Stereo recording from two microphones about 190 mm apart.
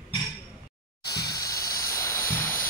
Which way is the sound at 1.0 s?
20° left (ahead or behind).